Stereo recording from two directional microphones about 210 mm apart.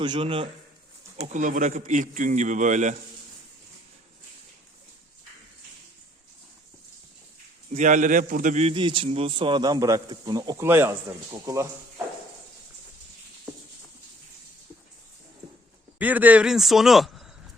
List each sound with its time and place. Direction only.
0.0 s a man's voice: 25° right (ahead or behind)
1.1 s a man's voice: 35° right (ahead or behind)
7.7 s a man's voice: 35° right (ahead or behind); by 11.7 s 15° right (ahead or behind)
16.0 s speech: 5° right (ahead or behind)